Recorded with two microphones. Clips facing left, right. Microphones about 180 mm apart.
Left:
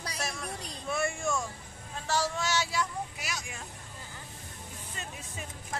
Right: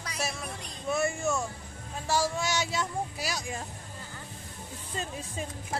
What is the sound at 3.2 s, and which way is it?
Speech, 35° right (ahead or behind).